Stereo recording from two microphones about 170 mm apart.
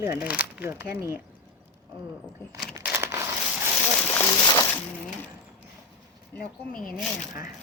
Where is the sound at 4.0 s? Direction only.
10° left (ahead or behind).